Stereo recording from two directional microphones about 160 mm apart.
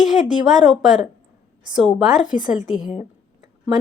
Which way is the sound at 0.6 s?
5° right (ahead or behind).